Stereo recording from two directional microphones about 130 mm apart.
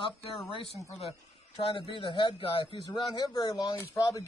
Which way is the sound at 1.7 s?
40° left (ahead or behind).